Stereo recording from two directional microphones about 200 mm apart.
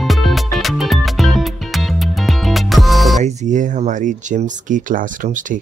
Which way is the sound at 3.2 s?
35° right (ahead or behind).